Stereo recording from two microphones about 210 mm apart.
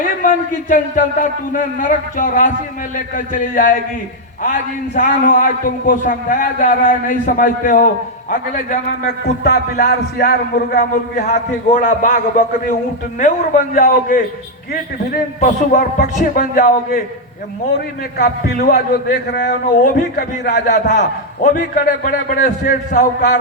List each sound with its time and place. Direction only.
0.0 s a man's voice: 40° left (ahead or behind)
18.2 s a man's voice: 45° left (ahead or behind)